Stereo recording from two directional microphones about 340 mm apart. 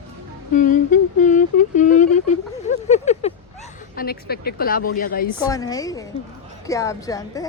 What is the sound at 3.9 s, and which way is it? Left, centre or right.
Humming, left.